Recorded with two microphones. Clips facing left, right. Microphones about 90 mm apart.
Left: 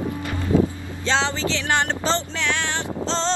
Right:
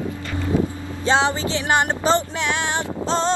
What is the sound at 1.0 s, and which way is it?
Music, 15° right (ahead or behind).